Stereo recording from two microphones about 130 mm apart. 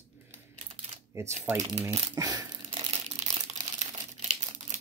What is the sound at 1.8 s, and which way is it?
Speech, 25° right (ahead or behind).